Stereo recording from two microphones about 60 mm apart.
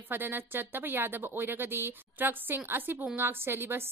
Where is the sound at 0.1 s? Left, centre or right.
Right.